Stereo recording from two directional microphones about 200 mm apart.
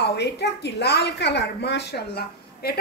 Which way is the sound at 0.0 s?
55° left (ahead or behind).